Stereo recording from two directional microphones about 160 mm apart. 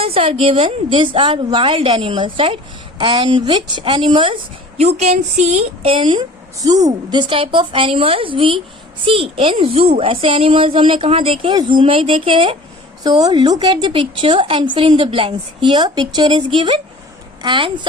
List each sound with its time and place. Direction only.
0.0 s a woman's voice: 35° right (ahead or behind)
4.9 s a woman's voice: 45° right (ahead or behind); by 17.7 s 30° right (ahead or behind)